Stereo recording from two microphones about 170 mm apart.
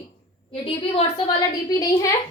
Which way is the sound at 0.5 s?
35° left (ahead or behind).